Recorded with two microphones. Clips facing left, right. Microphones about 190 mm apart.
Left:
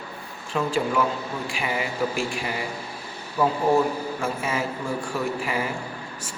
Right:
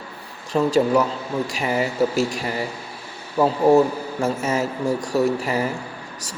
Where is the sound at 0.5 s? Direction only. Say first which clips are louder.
Right 6 dB; 40° right (ahead or behind).